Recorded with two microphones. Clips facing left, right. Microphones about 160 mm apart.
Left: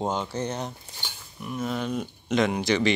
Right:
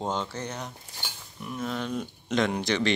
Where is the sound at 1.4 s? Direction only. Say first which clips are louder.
Left 3 dB; 5° left (ahead or behind).